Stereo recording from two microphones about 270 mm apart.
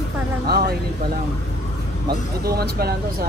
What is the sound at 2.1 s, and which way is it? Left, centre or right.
Speech, right.